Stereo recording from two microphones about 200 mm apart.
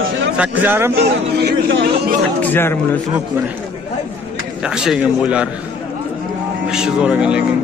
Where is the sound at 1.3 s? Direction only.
55° right (ahead or behind).